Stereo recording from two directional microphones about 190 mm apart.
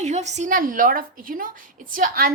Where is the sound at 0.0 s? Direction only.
35° right (ahead or behind).